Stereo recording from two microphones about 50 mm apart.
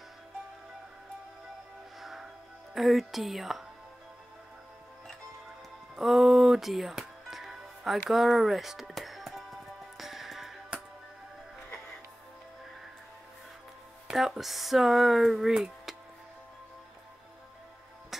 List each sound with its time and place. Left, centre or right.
2.0 s music: centre
2.7 s speech: centre
5.9 s music: centre
14.1 s speech: centre